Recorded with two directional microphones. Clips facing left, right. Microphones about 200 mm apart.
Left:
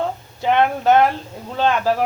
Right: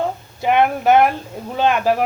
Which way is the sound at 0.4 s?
10° right (ahead or behind).